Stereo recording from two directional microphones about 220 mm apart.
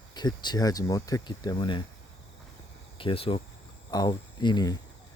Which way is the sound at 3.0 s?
25° left (ahead or behind).